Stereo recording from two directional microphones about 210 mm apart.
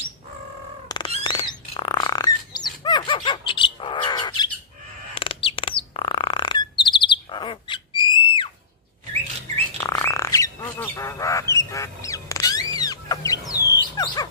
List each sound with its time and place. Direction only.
0.8 s squawk: 20° left (ahead or behind)
1.2 s a sound: 20° left (ahead or behind)
5.1 s bird: 25° left (ahead or behind)
9.8 s bird: 15° left (ahead or behind)
13.7 s music: 20° left (ahead or behind)